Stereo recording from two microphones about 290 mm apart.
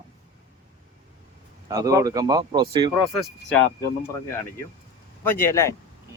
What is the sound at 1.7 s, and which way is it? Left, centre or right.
Speech, centre.